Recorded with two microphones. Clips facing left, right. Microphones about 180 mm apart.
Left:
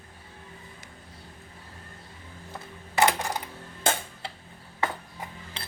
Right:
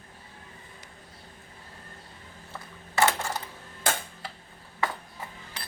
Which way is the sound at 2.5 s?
15° left (ahead or behind).